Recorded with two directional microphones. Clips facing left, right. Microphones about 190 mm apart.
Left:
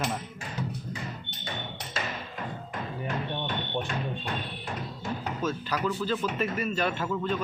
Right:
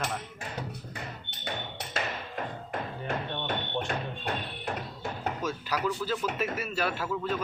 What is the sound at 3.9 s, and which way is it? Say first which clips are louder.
Music: even; 60° right (ahead or behind).